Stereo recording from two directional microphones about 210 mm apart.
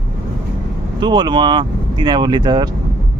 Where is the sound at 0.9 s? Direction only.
20° right (ahead or behind).